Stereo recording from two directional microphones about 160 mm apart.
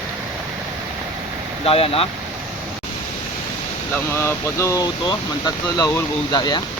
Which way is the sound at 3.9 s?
15° left (ahead or behind).